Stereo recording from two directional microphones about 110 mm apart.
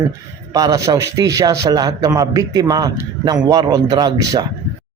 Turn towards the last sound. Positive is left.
turn(degrees=-40)  # may be behind; listen again after turning